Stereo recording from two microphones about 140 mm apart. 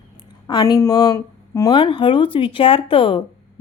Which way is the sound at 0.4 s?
30° left (ahead or behind).